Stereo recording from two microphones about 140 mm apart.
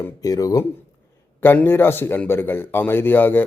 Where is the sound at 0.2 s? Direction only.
25° left (ahead or behind).